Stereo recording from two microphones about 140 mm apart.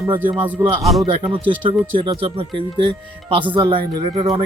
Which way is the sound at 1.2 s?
35° right (ahead or behind).